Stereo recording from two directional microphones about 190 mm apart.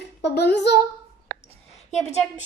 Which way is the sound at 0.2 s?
60° left (ahead or behind).